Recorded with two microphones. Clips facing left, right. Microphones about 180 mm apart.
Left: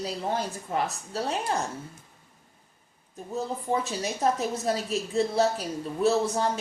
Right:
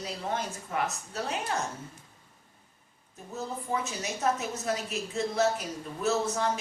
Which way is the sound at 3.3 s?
30° left (ahead or behind).